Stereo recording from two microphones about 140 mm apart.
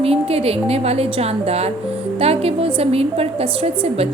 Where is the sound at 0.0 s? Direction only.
45° right (ahead or behind).